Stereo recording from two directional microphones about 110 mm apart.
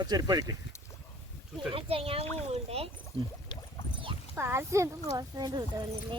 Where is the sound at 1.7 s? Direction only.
55° right (ahead or behind).